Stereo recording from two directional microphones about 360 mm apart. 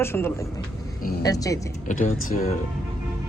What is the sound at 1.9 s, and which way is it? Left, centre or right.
Speech, left.